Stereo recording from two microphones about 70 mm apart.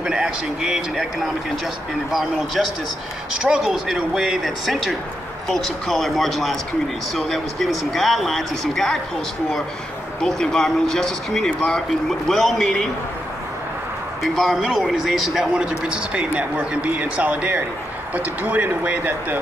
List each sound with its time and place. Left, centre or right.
0.0 s a man's voice: centre
2.1 s speech: centre
10.2 s speech: centre
14.2 s a man's voice: centre; by 19.3 s right